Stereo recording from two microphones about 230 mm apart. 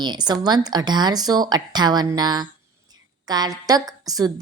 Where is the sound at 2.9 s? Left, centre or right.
Centre.